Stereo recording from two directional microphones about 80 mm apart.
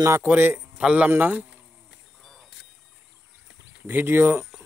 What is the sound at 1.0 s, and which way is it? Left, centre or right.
Speech, right.